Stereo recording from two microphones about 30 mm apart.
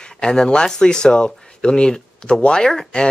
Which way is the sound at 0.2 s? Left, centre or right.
Left.